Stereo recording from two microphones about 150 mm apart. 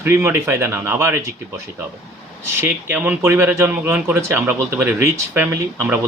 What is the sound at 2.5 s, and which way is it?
Speech, 15° right (ahead or behind).